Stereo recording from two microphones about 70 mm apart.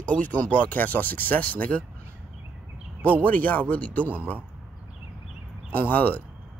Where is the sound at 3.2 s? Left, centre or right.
Left.